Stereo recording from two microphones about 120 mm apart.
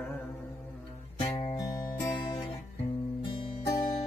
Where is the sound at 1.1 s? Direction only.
55° left (ahead or behind).